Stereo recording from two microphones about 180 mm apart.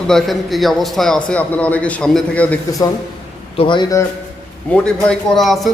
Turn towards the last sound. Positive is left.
turn(degrees=0)  # may be behind; listen again after turning